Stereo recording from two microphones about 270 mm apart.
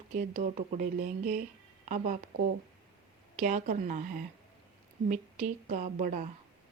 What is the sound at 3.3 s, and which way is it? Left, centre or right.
Speech, right.